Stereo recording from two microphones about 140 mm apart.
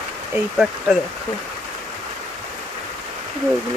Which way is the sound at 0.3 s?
5° right (ahead or behind).